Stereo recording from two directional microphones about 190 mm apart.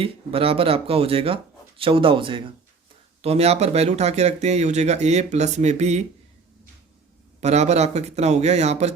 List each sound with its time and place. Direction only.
0.0 s speech: 30° right (ahead or behind)
7.4 s speech: 35° right (ahead or behind)